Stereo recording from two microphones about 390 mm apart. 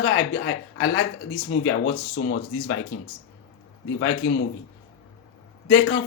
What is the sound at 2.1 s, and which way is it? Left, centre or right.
Speech, left.